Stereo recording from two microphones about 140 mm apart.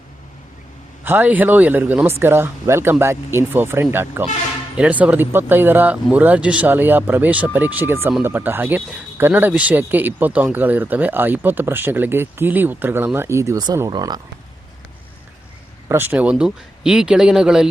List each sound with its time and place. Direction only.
1.0 s speech: 15° right (ahead or behind)
15.9 s speech: 15° right (ahead or behind)